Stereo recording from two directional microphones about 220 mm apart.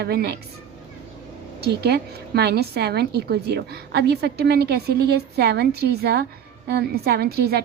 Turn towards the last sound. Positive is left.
turn(degrees=-45)  # may be behind; listen again after turning